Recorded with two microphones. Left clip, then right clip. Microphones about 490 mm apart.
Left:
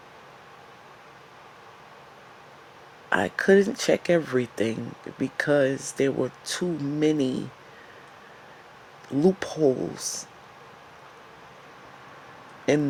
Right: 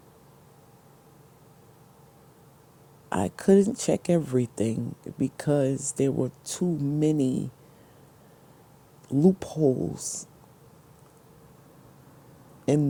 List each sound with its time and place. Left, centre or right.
3.1 s speech: right
9.0 s speech: right
12.6 s speech: right